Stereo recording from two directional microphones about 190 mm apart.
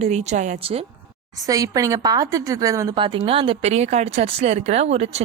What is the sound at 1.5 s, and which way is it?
A woman's voice, 20° right (ahead or behind).